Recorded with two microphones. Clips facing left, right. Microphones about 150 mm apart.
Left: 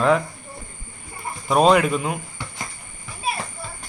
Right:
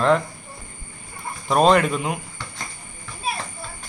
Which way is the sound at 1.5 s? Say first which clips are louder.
Left 1 dB; 5° left (ahead or behind).